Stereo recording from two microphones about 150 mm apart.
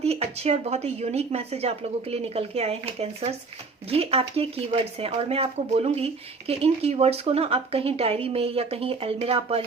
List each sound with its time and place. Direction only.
0.0 s a woman's voice: 45° right (ahead or behind)